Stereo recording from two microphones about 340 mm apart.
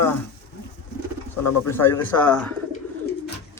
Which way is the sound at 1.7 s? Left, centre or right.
Centre.